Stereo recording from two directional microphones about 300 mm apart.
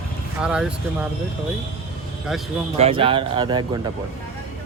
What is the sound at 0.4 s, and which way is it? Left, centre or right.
Speech, centre.